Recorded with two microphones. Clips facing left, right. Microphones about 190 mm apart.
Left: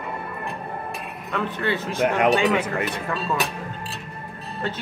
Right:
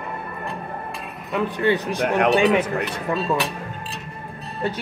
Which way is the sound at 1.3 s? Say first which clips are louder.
Right 5 dB; 15° right (ahead or behind).